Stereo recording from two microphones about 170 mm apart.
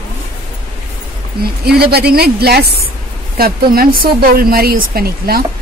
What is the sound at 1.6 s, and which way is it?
Speech, 70° right (ahead or behind).